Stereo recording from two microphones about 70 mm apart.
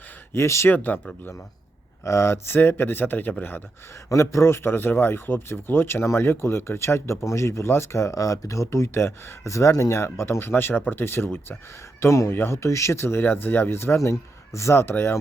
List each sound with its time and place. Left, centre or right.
0.3 s a man's voice: left
0.7 s speech: left
2.0 s a man's voice: left
4.1 s a man's voice: left